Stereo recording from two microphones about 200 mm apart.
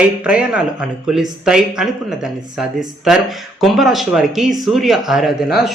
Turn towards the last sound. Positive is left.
turn(degrees=0)  # may be behind; listen again after turning